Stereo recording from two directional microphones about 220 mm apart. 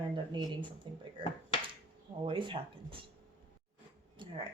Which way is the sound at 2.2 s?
20° right (ahead or behind).